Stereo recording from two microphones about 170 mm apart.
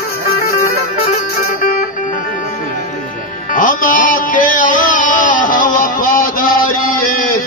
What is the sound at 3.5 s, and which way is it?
Music, 50° left (ahead or behind).